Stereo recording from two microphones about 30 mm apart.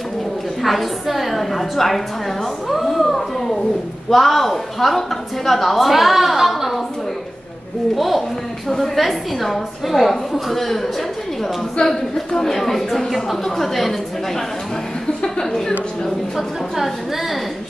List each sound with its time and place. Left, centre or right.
0.6 s a sound: centre
4.1 s a woman's voice: centre
7.9 s a woman's voice: centre
8.6 s a woman's voice: centre
11.8 s speech: left
12.3 s speech: centre
16.3 s a woman's voice: centre